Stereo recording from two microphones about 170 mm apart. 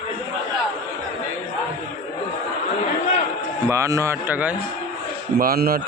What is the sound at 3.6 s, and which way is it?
Speech, 15° right (ahead or behind).